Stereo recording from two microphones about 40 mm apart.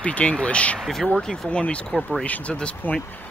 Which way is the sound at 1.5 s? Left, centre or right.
Left.